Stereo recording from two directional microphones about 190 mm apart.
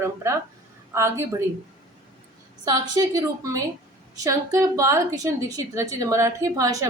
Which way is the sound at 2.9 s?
20° right (ahead or behind).